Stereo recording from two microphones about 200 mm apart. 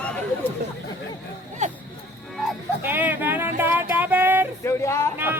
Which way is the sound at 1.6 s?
35° right (ahead or behind).